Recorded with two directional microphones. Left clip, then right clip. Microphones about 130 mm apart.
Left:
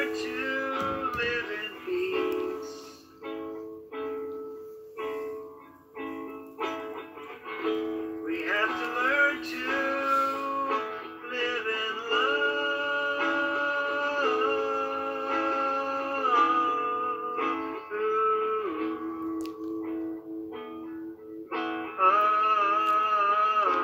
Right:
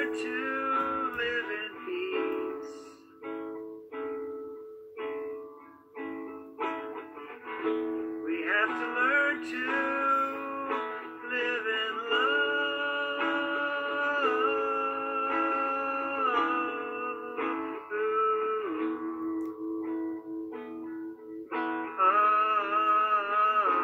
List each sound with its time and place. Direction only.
0.0 s music: 20° right (ahead or behind)
3.9 s music: 25° right (ahead or behind)
7.5 s music: 25° right (ahead or behind)
21.5 s music: 20° right (ahead or behind)